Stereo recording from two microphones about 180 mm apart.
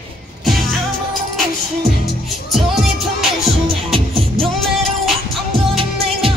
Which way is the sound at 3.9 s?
30° right (ahead or behind).